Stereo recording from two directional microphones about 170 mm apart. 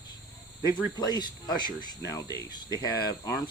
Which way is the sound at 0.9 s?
25° left (ahead or behind).